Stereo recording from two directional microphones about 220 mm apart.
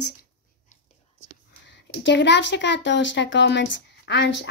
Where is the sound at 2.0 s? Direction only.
55° left (ahead or behind).